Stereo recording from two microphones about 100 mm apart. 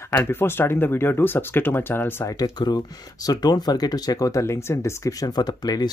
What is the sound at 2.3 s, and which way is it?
Speech, 40° left (ahead or behind).